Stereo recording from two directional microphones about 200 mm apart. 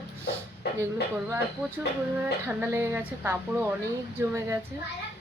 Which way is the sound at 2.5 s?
10° right (ahead or behind).